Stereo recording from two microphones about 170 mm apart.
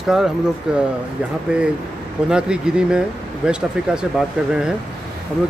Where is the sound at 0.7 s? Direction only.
5° right (ahead or behind).